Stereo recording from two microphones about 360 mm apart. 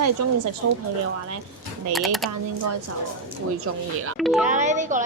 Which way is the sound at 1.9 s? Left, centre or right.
Centre.